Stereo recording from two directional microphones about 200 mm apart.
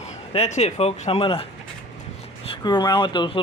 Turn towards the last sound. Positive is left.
turn(degrees=25)  # may be behind; listen again after turning